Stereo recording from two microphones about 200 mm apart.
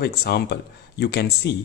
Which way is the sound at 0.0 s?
50° left (ahead or behind).